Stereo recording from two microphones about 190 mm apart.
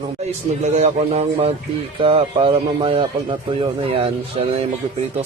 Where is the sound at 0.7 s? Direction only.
35° right (ahead or behind).